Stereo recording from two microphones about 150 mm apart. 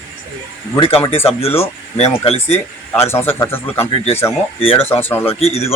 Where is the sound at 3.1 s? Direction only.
15° left (ahead or behind).